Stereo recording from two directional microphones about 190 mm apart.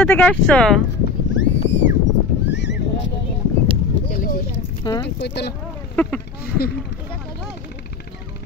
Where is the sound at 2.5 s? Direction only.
65° left (ahead or behind).